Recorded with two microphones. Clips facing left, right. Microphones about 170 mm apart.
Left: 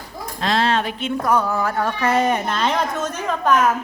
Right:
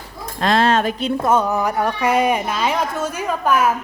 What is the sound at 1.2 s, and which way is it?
Speech, 20° right (ahead or behind).